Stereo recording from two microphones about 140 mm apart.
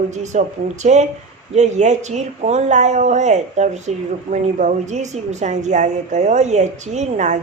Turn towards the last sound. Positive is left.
turn(degrees=-55)  # may be behind; listen again after turning